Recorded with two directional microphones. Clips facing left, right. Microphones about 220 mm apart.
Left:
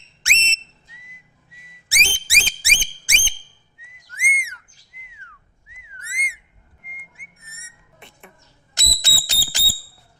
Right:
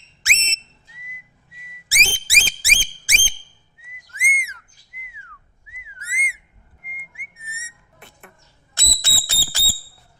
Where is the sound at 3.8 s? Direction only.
5° right (ahead or behind).